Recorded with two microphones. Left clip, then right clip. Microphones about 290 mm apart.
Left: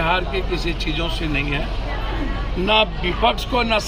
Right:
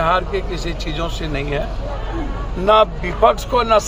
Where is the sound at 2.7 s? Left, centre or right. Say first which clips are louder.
Right 5 dB; centre.